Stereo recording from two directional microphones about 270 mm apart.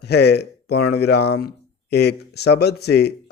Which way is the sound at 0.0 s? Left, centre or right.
Left.